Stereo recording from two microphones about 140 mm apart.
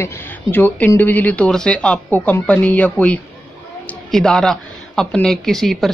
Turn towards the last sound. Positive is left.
turn(degrees=0)  # may be behind; listen again after turning